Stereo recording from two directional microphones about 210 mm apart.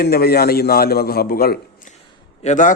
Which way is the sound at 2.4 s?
35° left (ahead or behind).